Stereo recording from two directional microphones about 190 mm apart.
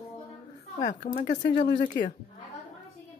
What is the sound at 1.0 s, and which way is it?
Speech, 50° left (ahead or behind).